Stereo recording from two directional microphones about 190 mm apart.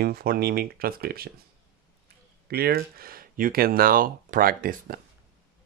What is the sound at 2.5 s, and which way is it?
Speech, 55° right (ahead or behind).